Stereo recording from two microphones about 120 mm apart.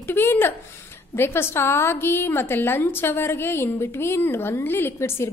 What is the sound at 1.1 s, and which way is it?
A woman's voice, 20° left (ahead or behind).